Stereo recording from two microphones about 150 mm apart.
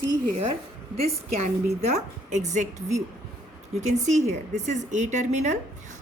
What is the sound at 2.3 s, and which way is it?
A woman's voice, 55° right (ahead or behind).